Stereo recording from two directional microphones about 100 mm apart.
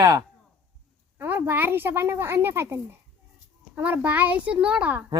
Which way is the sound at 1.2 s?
20° right (ahead or behind).